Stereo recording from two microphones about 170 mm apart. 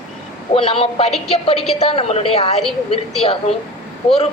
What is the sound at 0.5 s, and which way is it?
A woman's voice, 30° left (ahead or behind).